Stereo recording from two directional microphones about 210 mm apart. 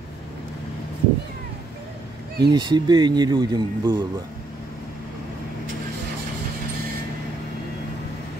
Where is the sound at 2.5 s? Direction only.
20° right (ahead or behind).